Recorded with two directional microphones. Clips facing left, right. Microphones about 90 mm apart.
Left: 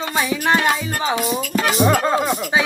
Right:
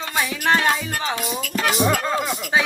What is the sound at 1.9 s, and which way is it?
Music, 40° left (ahead or behind).